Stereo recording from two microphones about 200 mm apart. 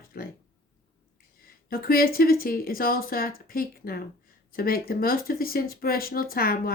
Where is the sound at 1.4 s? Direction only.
45° left (ahead or behind).